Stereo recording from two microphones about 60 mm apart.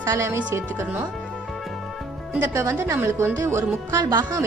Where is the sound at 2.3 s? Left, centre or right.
Right.